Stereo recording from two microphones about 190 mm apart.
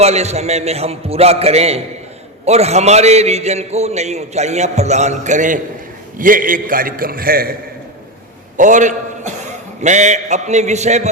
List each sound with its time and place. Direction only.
0.0 s a man's voice: 35° right (ahead or behind); by 7.5 s 50° right (ahead or behind)
8.5 s a man's voice: 40° right (ahead or behind)